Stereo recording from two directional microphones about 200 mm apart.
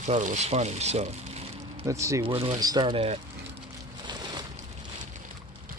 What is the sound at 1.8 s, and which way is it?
Speech, 15° right (ahead or behind).